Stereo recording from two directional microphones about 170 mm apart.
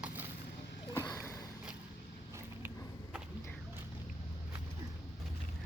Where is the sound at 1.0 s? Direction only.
20° left (ahead or behind).